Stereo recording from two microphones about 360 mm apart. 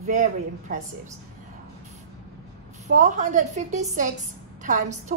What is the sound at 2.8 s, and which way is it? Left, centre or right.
A woman's voice, right.